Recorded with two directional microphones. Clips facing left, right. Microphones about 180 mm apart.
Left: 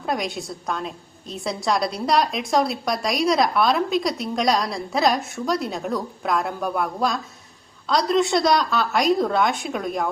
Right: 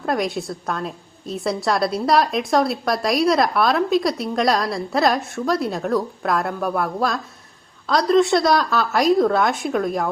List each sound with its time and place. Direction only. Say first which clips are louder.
0.0 s a woman's voice: right 4 dB; centre (ahead or behind)